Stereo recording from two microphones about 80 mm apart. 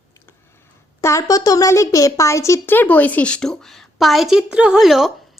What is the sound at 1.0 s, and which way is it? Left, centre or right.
A woman's voice, left.